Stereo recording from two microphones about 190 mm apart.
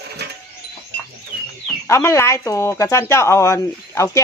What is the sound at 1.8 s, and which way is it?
Speech, 15° left (ahead or behind).